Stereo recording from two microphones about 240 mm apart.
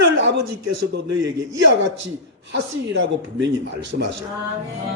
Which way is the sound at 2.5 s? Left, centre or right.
Right.